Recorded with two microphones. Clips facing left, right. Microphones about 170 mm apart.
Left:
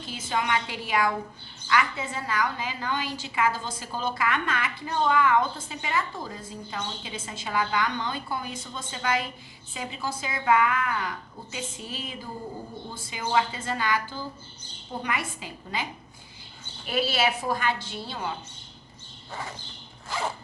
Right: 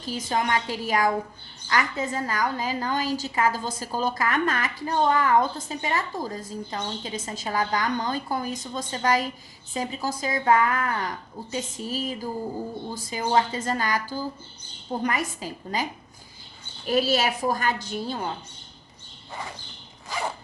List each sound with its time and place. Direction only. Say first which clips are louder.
0.0 s a woman's voice: right 3 dB; 40° right (ahead or behind)